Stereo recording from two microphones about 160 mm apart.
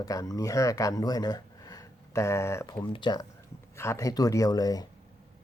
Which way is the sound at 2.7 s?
30° left (ahead or behind).